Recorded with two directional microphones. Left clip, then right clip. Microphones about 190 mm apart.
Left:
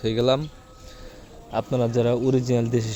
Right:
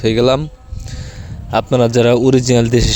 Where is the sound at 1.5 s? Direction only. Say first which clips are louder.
Right 11 dB; 45° right (ahead or behind).